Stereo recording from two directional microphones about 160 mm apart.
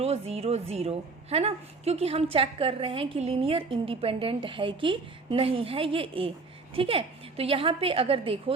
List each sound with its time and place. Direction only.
0.0 s a woman's voice: 40° right (ahead or behind)